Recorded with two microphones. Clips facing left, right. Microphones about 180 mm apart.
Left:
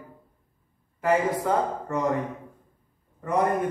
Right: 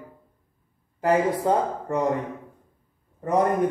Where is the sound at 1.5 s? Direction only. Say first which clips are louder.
Right 3 dB; 30° right (ahead or behind).